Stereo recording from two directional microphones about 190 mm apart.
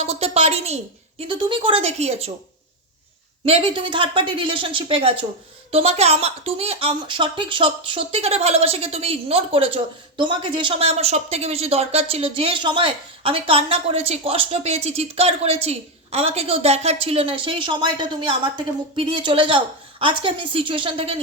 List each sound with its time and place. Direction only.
0.0 s a sound: 35° right (ahead or behind)
1.2 s speech: 25° right (ahead or behind)
3.4 s speech: 30° right (ahead or behind)